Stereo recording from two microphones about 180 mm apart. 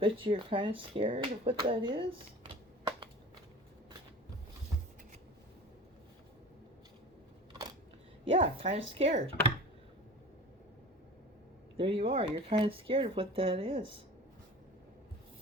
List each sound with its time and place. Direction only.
0.0 s speech: 30° right (ahead or behind)
8.2 s speech: 30° right (ahead or behind)
11.8 s speech: 30° right (ahead or behind)